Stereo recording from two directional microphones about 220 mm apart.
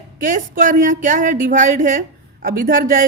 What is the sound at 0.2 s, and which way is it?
Speech, 35° right (ahead or behind).